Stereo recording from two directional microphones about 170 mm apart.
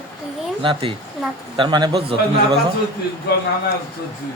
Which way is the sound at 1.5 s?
25° right (ahead or behind).